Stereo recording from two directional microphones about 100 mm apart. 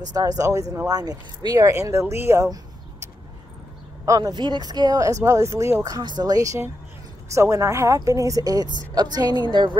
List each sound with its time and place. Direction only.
0.0 s speech: 40° right (ahead or behind)
5.9 s a woman's voice: 45° right (ahead or behind)